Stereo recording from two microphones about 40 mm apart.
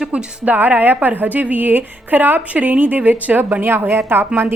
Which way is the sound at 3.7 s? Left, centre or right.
Right.